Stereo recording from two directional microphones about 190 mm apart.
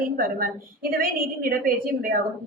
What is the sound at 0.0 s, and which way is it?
A woman's voice, 50° right (ahead or behind).